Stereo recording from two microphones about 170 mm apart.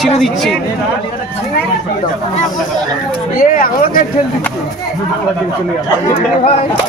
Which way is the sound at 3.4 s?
60° left (ahead or behind).